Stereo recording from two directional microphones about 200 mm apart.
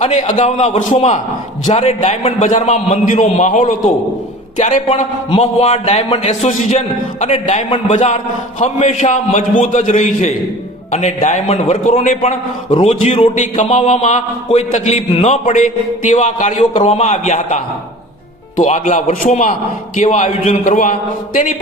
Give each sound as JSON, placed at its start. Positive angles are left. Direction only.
{"t": 0.0, "sound": "a man's voice", "side_deg": 35}